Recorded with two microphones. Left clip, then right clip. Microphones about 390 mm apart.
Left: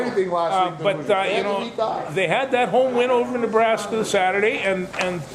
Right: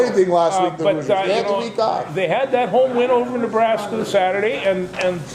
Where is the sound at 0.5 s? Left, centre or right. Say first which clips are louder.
Right 3 dB; left.